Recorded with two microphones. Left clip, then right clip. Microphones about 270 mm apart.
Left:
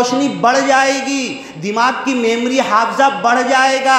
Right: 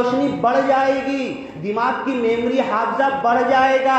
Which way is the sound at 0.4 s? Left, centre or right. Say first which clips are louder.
Left 5 dB; left.